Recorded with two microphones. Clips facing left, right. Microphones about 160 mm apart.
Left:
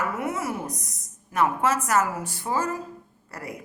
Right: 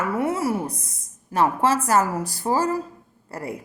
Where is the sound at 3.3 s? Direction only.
30° right (ahead or behind).